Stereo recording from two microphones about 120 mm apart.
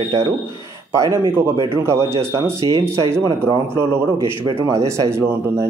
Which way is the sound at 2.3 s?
25° right (ahead or behind).